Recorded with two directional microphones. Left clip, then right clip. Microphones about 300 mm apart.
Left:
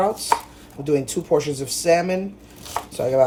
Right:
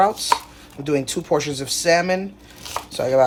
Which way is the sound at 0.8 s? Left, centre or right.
Right.